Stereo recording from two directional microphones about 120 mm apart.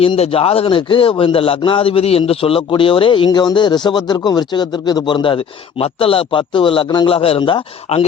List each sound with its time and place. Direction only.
0.0 s speech: 50° left (ahead or behind)
3.2 s speech: 35° left (ahead or behind)
7.1 s speech: 50° left (ahead or behind)